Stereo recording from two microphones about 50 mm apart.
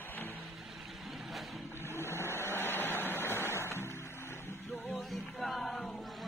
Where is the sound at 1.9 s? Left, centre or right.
Left.